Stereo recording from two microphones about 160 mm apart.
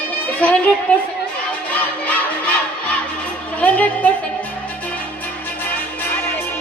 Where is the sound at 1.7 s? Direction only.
10° left (ahead or behind).